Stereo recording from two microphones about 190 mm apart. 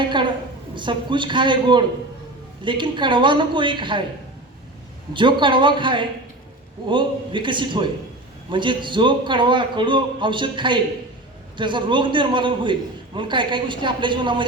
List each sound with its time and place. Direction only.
0.8 s a man's voice: 25° right (ahead or behind)
5.1 s a man's voice: 25° right (ahead or behind)